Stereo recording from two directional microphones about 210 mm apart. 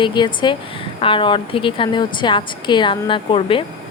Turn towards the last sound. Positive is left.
turn(degrees=25)  # may be behind; listen again after turning